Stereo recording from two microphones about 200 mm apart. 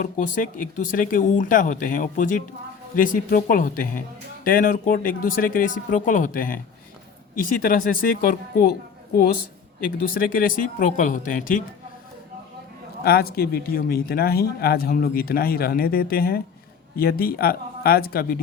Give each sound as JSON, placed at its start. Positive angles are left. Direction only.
{"t": 0.0, "sound": "speech", "side_deg": 40}
{"t": 10.2, "sound": "speech", "side_deg": 45}
{"t": 13.0, "sound": "speech", "side_deg": 50}